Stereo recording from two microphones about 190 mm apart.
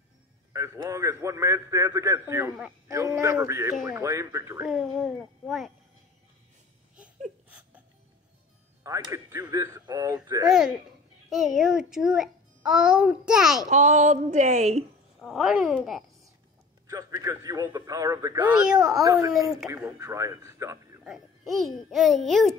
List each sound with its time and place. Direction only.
0.5 s a man's voice: 15° right (ahead or behind)
4.6 s a child's voice: centre (ahead or behind)
8.8 s a man's voice: 20° right (ahead or behind)
11.2 s a child's voice: centre (ahead or behind)
13.7 s a woman's voice: 40° right (ahead or behind)
15.2 s a child's voice: centre (ahead or behind)
16.8 s a man's voice: 20° right (ahead or behind)
18.6 s a child's voice: 5° right (ahead or behind)
19.7 s a man's voice: 15° right (ahead or behind)
21.1 s a child's voice: centre (ahead or behind)